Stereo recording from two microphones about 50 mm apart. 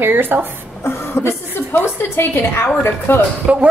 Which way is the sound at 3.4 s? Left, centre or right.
Centre.